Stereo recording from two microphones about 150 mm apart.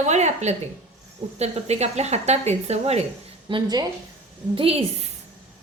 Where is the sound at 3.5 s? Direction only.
25° right (ahead or behind).